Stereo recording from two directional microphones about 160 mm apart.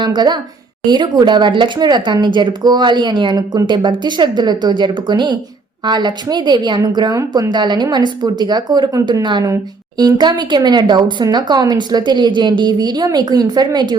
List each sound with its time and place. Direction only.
0.0 s speech: 30° right (ahead or behind)